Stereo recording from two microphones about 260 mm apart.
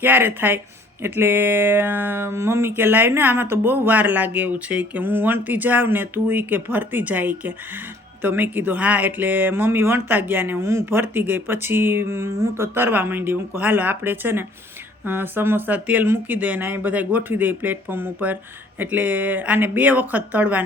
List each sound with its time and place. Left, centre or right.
0.0 s speech: centre